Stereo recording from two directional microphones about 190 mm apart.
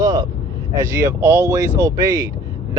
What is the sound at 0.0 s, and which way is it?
Vehicle, 20° right (ahead or behind).